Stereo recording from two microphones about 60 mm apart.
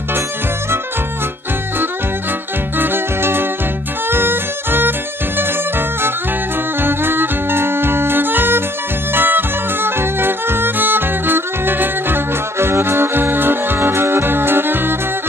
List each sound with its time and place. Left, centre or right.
2.8 s music: right